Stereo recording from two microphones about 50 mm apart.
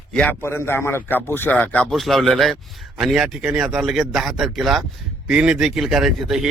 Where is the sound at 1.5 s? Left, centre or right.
Left.